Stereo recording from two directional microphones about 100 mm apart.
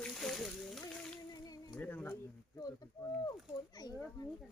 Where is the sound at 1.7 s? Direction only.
15° left (ahead or behind).